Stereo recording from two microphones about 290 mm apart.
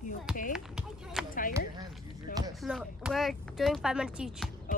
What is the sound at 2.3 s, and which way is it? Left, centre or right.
Speech, centre.